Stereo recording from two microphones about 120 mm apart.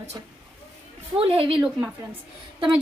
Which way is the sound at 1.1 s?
50° right (ahead or behind).